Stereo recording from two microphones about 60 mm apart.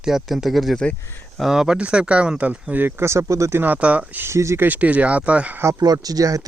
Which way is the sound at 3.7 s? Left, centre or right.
Right.